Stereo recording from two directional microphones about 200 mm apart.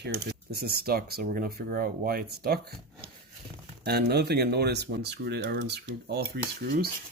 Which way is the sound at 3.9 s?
55° right (ahead or behind).